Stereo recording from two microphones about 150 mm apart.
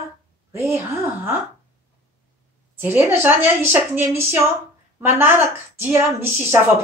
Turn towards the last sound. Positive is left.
turn(degrees=-15)  # may be behind; listen again after turning